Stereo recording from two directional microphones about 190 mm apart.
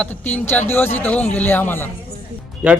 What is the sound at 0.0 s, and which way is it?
Speech, 10° left (ahead or behind).